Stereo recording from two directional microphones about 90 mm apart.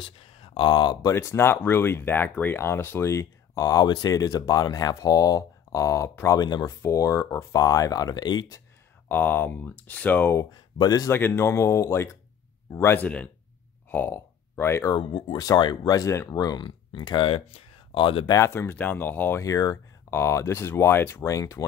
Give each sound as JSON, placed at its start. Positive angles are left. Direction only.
{"t": 0.0, "sound": "speech", "side_deg": 65}
{"t": 1.1, "sound": "speech", "side_deg": 30}
{"t": 6.4, "sound": "speech", "side_deg": 50}
{"t": 6.8, "sound": "speech", "side_deg": 35}
{"t": 9.1, "sound": "speech", "side_deg": 20}
{"t": 10.5, "sound": "speech", "side_deg": 50}
{"t": 11.1, "sound": "speech", "side_deg": 25}
{"t": 14.9, "sound": "speech", "side_deg": 50}
{"t": 16.6, "sound": "speech", "side_deg": 55}
{"t": 18.3, "sound": "speech", "side_deg": 30}
{"t": 18.8, "sound": "speech", "side_deg": 20}
{"t": 19.4, "sound": "speech", "side_deg": 45}
{"t": 20.1, "sound": "speech", "side_deg": 30}